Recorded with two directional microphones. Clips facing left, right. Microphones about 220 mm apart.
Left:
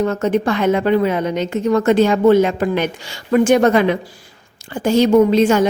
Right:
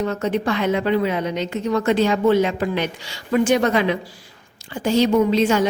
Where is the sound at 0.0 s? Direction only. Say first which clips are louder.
Left 5 dB; 50° left (ahead or behind).